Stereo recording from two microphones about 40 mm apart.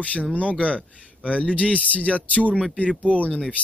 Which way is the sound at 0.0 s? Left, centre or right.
Left.